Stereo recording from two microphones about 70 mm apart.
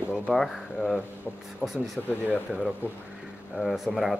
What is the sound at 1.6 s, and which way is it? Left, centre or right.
Speech, centre.